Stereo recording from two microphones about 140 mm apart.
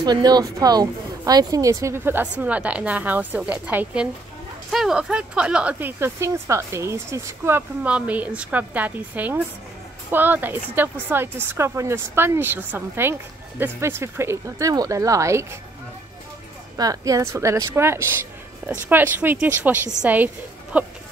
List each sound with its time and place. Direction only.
0.0 s speech: 30° right (ahead or behind)
16.7 s speech: 25° right (ahead or behind); by 20.9 s 10° right (ahead or behind)